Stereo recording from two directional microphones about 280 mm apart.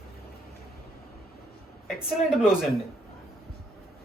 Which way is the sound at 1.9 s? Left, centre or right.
Centre.